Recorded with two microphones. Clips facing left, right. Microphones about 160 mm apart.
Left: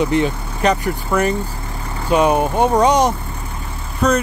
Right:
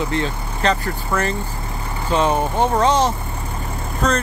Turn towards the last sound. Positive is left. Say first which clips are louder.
# left 3 dB
turn(degrees=10)  # may be behind; listen again after turning